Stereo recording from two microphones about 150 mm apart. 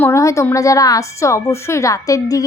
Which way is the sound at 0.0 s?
20° left (ahead or behind).